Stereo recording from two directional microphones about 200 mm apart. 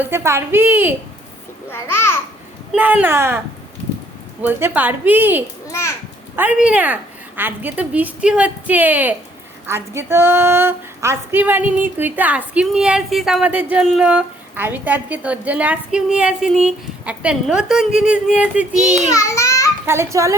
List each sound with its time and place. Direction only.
0.0 s speech: 10° right (ahead or behind)
1.7 s a child's voice: 10° left (ahead or behind)
2.7 s speech: 10° right (ahead or behind)
4.4 s speech: 10° right (ahead or behind)
18.3 s child singing: 5° right (ahead or behind)
19.1 s a sound: 15° left (ahead or behind)
19.8 s speech: 15° right (ahead or behind)